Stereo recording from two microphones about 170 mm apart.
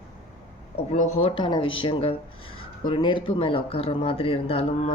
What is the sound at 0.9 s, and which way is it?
Speech, 35° left (ahead or behind).